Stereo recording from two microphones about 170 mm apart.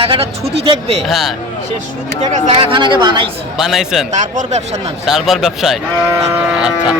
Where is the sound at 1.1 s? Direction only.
Centre (ahead or behind).